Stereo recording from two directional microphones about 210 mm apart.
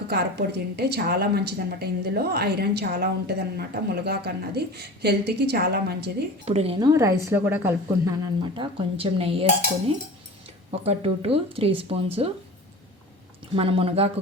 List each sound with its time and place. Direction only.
0.1 s a woman's voice: 50° right (ahead or behind)
6.4 s a woman's voice: 30° right (ahead or behind)
10.8 s a woman's voice: 25° right (ahead or behind)
13.6 s a woman's voice: 25° right (ahead or behind)